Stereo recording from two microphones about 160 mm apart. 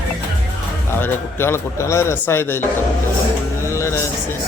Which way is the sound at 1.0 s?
15° left (ahead or behind).